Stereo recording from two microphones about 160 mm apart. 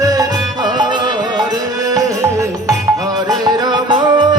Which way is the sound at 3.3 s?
25° right (ahead or behind).